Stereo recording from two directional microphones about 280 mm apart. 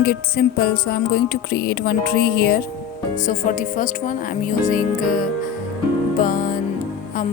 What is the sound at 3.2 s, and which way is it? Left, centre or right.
A woman's voice, left.